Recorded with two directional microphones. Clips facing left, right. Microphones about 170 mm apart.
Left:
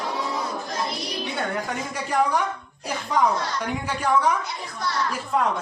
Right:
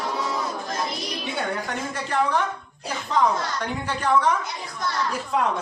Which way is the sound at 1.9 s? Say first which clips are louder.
Left 1 dB; 10° left (ahead or behind).